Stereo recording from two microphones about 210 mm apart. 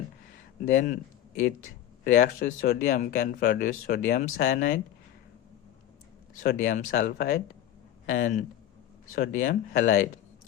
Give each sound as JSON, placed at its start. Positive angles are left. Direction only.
{"t": 0.6, "sound": "speech", "side_deg": 40}
{"t": 2.0, "sound": "speech", "side_deg": 40}
{"t": 6.4, "sound": "speech", "side_deg": 40}